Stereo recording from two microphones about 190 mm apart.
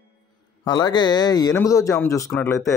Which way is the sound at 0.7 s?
20° left (ahead or behind).